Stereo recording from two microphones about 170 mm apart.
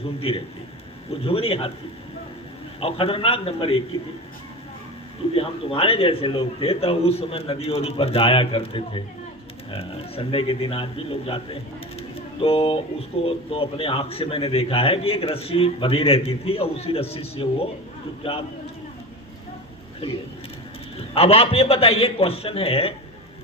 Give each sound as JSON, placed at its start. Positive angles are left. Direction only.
{"t": 0.2, "sound": "a man's voice", "side_deg": 35}
{"t": 2.8, "sound": "a man's voice", "side_deg": 35}
{"t": 5.3, "sound": "a man's voice", "side_deg": 35}
{"t": 21.2, "sound": "a man's voice", "side_deg": 35}